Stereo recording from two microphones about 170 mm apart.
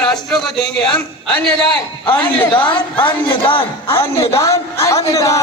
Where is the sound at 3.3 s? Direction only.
30° left (ahead or behind).